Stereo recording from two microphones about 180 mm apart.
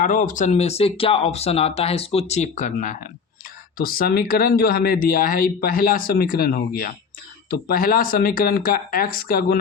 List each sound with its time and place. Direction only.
0.0 s speech: 45° left (ahead or behind)